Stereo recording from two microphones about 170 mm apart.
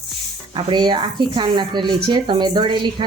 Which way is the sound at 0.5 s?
25° right (ahead or behind).